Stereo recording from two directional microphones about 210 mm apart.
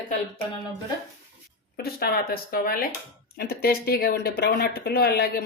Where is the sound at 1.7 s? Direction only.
45° left (ahead or behind).